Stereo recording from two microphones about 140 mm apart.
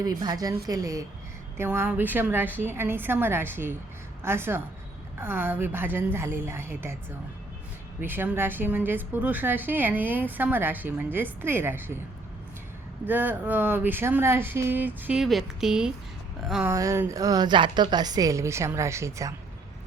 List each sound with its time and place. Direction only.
0.0 s a woman's voice: 30° right (ahead or behind)
8.0 s a woman's voice: 15° right (ahead or behind)
13.1 s a woman's voice: 15° right (ahead or behind)
15.2 s speech: centre (ahead or behind)
16.6 s a woman's voice: 20° right (ahead or behind)